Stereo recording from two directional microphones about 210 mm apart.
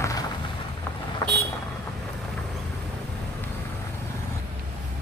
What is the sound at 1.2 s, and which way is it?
Vehicle, 20° left (ahead or behind).